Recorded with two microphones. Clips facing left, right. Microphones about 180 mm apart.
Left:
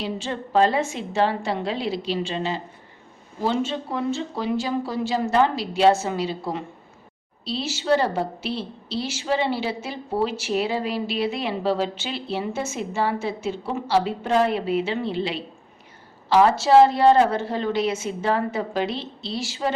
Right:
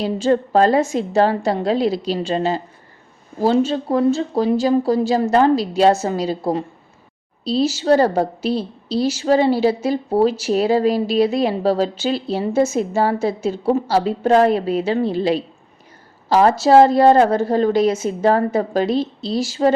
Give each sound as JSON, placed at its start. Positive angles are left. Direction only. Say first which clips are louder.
{"t": 0.0, "sound": "a woman's voice", "louder": "right 11 dB", "side_deg": -40}